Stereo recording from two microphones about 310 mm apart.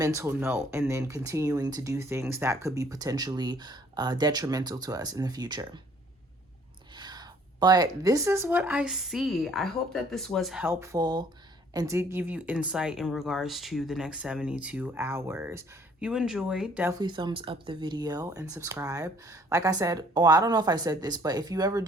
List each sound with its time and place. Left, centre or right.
0.0 s speech: centre
6.9 s speech: centre